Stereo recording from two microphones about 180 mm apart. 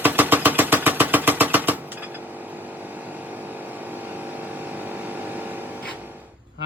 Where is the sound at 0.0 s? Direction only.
10° right (ahead or behind).